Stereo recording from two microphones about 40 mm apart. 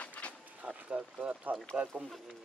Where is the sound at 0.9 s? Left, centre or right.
Right.